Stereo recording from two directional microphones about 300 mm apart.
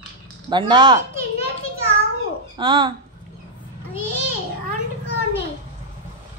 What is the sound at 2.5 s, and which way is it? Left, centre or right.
Speech, centre.